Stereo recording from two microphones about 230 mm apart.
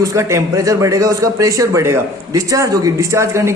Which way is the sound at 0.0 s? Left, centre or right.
Centre.